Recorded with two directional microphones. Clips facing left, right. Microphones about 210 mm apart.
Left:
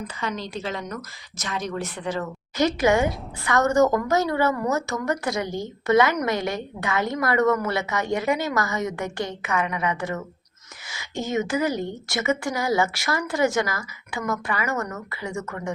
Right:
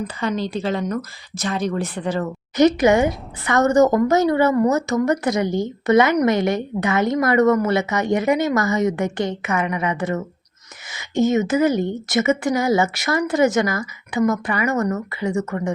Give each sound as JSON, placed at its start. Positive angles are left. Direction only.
{"t": 0.2, "sound": "speech", "side_deg": -30}
{"t": 2.6, "sound": "a woman's voice", "side_deg": -20}